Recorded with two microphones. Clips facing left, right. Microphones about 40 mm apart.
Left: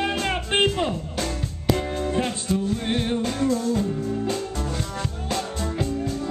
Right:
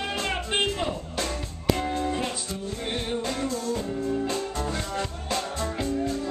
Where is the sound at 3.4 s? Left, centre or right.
Centre.